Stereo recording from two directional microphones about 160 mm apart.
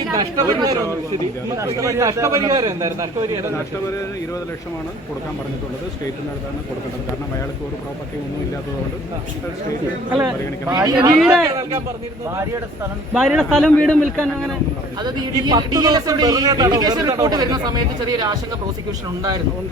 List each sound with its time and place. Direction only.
0.1 s a man's voice: 25° right (ahead or behind)
10.1 s speech: 10° right (ahead or behind)
10.7 s a man's voice: 25° right (ahead or behind)
13.1 s a man's voice: centre (ahead or behind)
15.0 s a man's voice: 25° right (ahead or behind)